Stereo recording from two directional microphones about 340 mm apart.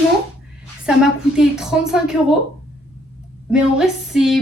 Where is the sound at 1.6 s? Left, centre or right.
Centre.